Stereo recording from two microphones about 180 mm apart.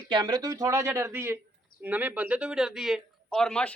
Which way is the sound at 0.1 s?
25° right (ahead or behind).